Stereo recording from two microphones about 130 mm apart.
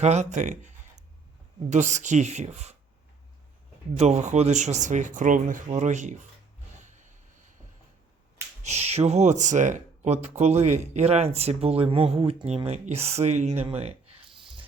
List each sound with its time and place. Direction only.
0.0 s speech: 60° right (ahead or behind)
3.9 s speech: 60° right (ahead or behind)
6.8 s vehicle: 70° right (ahead or behind)
8.6 s speech: 55° right (ahead or behind)
14.3 s dog: 40° right (ahead or behind)